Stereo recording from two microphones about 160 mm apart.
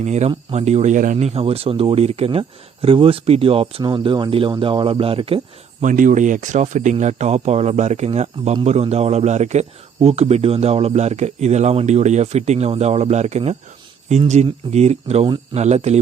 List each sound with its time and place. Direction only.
0.0 s speech: 45° right (ahead or behind)
5.8 s speech: 55° right (ahead or behind)